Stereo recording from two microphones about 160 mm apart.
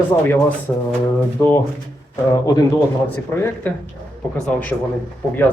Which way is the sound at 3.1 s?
10° left (ahead or behind).